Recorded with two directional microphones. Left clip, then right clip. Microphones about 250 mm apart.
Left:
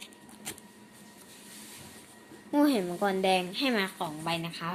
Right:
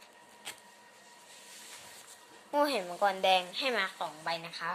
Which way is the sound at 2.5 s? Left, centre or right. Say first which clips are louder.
Left 3 dB; centre.